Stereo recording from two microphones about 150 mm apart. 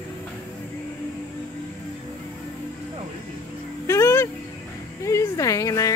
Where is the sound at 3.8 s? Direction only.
20° left (ahead or behind).